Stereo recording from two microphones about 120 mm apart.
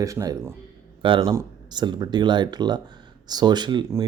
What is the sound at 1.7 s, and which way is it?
A man's voice, 35° right (ahead or behind).